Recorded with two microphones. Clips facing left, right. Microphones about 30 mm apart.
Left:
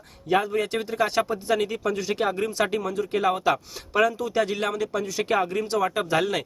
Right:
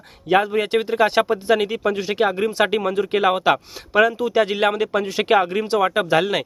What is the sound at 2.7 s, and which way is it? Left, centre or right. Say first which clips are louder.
Speech: right 6 dB; right.